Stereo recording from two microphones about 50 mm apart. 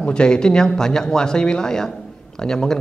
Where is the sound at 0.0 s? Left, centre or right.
Centre.